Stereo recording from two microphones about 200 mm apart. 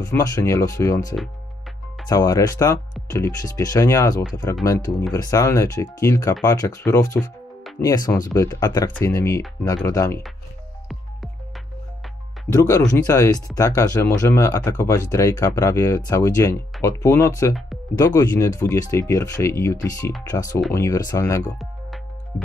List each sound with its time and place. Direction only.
0.0 s speech: 15° left (ahead or behind)
12.5 s speech: 15° left (ahead or behind)